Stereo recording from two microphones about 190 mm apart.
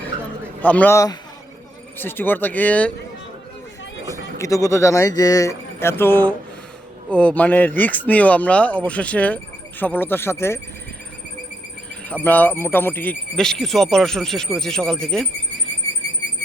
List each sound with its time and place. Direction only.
0.6 s speech: 10° left (ahead or behind)
4.1 s speech: 15° left (ahead or behind)
12.0 s speech: 10° left (ahead or behind)